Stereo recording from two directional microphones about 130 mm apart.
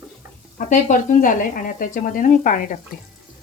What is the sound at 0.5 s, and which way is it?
Speech, 80° left.